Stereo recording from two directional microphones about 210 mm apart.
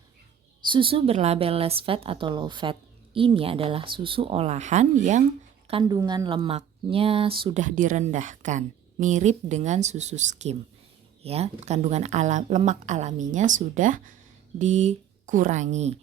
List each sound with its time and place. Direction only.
0.7 s a woman's voice: 25° right (ahead or behind)
5.8 s speech: 20° right (ahead or behind)